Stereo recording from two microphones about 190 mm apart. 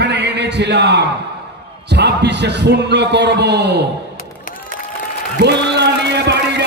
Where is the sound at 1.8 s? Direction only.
60° right (ahead or behind).